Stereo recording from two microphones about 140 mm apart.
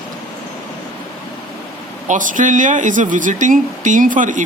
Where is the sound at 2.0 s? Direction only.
70° right (ahead or behind).